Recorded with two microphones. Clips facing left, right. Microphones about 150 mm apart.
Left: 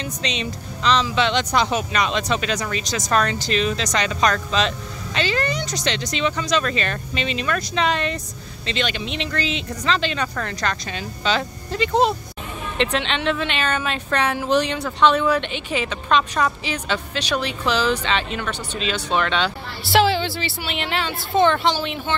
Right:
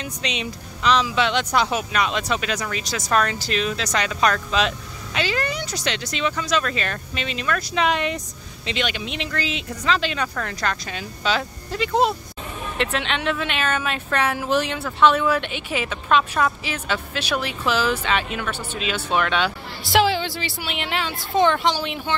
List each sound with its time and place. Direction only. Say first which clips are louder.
0.0 s speech: left 2 dB; 10° right (ahead or behind)
7.7 s speech: right 1 dB; 10° right (ahead or behind)